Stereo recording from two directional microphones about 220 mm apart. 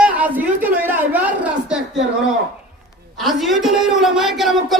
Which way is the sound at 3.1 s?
Centre (ahead or behind).